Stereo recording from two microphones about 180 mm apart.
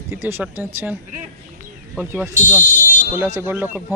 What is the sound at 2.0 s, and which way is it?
Speech, 10° right (ahead or behind).